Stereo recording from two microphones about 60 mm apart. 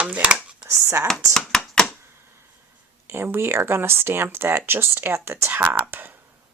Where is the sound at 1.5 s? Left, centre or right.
Centre.